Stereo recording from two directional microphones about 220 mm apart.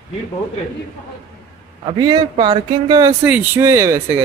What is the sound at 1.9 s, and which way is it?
Speech, 20° right (ahead or behind).